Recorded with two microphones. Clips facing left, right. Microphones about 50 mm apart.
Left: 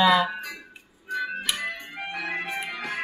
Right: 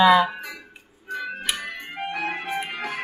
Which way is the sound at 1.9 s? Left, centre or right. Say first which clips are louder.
Right 5 dB; right.